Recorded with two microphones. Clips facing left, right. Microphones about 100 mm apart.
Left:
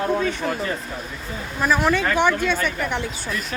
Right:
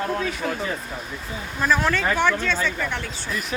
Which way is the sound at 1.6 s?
10° left (ahead or behind).